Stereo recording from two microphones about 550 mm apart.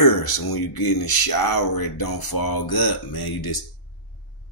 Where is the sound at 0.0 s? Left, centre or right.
Left.